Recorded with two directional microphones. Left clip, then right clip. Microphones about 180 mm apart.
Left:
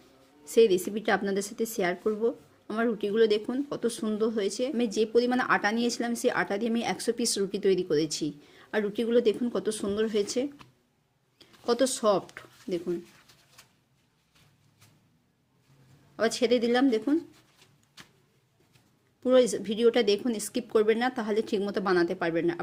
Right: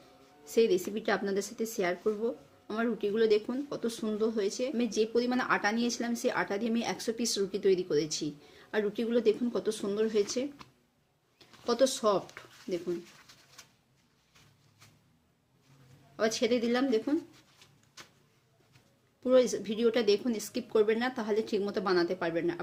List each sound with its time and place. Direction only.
0.4 s a woman's voice: 40° left (ahead or behind)
16.1 s speech: 35° left (ahead or behind)
19.2 s speech: 35° left (ahead or behind)